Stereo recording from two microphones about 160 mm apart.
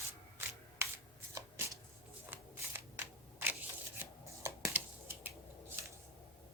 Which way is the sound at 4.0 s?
15° right (ahead or behind).